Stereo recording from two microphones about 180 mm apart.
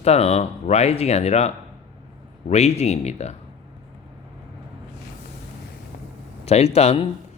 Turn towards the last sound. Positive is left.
turn(degrees=35)  # may be behind; listen again after turning